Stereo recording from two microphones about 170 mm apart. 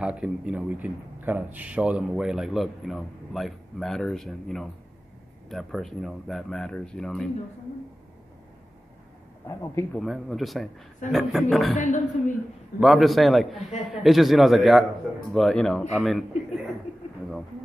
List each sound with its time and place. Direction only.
0.0 s speech: 5° right (ahead or behind)
9.5 s speech: 20° left (ahead or behind)
9.9 s speech: centre (ahead or behind)
11.8 s a woman's voice: 50° left (ahead or behind)
12.8 s speech: centre (ahead or behind)